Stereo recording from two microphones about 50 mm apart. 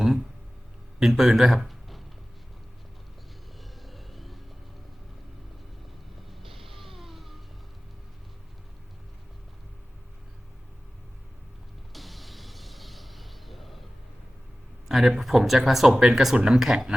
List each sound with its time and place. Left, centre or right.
0.9 s speech: centre
3.6 s vehicle: centre
6.4 s music: centre
11.9 s music: centre
14.8 s speech: centre
16.0 s speech: centre